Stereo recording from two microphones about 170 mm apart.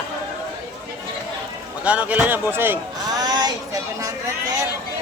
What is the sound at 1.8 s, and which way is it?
Speech, 5° right (ahead or behind).